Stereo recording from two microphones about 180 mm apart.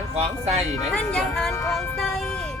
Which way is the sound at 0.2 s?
35° right (ahead or behind).